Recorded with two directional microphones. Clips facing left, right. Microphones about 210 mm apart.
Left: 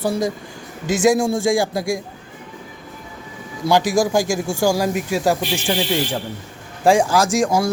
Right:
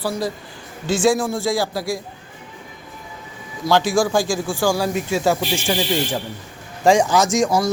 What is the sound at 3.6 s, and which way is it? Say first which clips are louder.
A man's voice: left 1 dB; 15° left (ahead or behind).